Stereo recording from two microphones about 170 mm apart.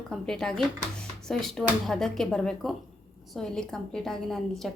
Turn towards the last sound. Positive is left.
turn(degrees=0)  # may be behind; listen again after turning